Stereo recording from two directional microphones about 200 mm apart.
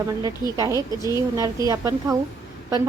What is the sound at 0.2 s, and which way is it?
Speech, 20° right (ahead or behind).